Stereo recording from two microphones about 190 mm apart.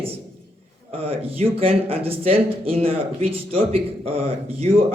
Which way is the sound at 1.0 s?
30° right (ahead or behind).